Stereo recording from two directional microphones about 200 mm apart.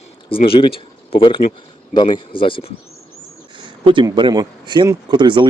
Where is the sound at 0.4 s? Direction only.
25° left (ahead or behind).